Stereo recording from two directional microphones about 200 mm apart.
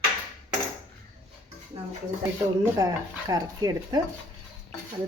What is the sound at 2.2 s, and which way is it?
Speech, 15° right (ahead or behind).